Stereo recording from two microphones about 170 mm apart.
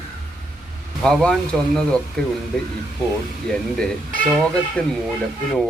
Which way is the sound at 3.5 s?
5° left (ahead or behind).